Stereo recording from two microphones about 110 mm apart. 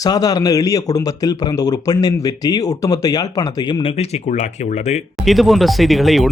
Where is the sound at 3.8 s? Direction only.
70° left (ahead or behind); by 5.0 s 90° left.